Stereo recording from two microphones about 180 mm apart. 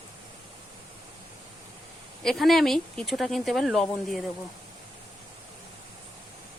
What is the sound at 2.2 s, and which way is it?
Speech, centre (ahead or behind).